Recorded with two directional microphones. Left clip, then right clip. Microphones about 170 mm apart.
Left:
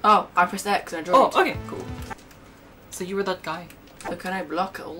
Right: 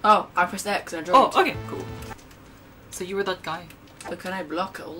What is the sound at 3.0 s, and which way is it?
Speech, 35° left (ahead or behind).